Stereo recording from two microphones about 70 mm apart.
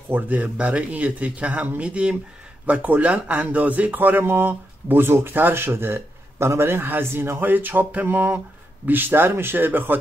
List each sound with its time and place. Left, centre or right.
0.1 s speech: right